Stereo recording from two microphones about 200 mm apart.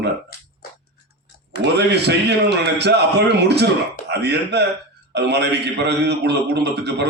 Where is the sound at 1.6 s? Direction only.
55° right (ahead or behind).